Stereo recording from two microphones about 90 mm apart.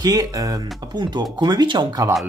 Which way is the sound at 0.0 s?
45° right (ahead or behind).